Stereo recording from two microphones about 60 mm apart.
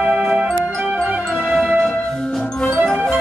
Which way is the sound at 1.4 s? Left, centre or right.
Centre.